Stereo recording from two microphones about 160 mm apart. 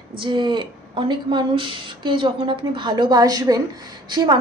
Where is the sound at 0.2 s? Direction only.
30° right (ahead or behind).